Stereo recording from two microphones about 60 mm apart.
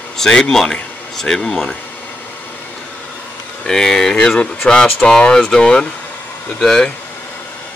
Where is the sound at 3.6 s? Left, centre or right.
Centre.